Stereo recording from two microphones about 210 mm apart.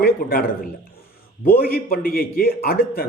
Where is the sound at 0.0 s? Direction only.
45° left (ahead or behind).